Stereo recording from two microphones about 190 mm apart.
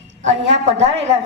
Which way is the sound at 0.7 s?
35° right (ahead or behind).